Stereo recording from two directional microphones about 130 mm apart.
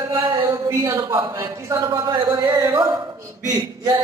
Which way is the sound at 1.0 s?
35° right (ahead or behind).